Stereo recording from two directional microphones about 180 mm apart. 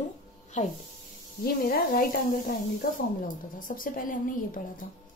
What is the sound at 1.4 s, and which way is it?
A woman's voice, 55° left (ahead or behind).